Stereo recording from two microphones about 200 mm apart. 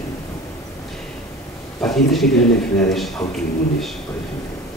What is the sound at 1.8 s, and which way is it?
Speech, centre (ahead or behind).